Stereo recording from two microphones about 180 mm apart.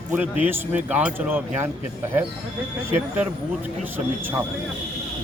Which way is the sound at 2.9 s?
10° right (ahead or behind).